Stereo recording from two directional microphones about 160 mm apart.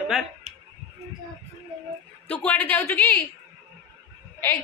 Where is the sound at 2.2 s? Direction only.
10° left (ahead or behind).